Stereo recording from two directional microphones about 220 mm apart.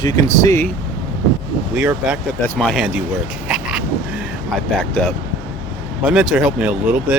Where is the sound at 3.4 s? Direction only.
5° right (ahead or behind).